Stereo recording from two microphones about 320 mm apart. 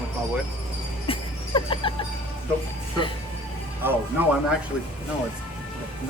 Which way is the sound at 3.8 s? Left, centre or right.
Centre.